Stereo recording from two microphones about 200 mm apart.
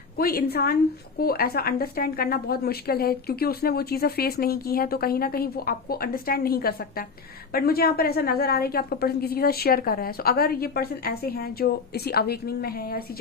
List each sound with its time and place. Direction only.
0.2 s a woman's voice: 50° left (ahead or behind)